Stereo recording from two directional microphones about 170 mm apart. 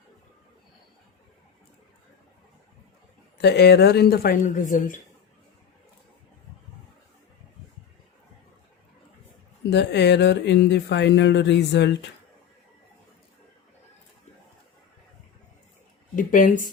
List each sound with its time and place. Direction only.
3.3 s speech: 80° left
4.4 s a woman's voice: 50° left (ahead or behind)
9.6 s speech: 85° left
16.1 s speech: 50° left (ahead or behind)